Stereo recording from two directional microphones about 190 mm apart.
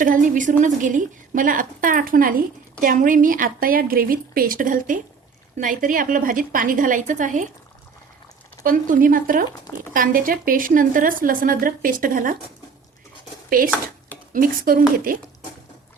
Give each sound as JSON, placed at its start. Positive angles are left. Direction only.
{"t": 0.0, "sound": "a woman's voice", "side_deg": -45}
{"t": 8.6, "sound": "a woman's voice", "side_deg": -45}
{"t": 13.5, "sound": "a woman's voice", "side_deg": -45}